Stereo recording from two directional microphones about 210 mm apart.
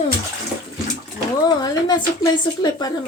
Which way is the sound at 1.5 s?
20° left (ahead or behind).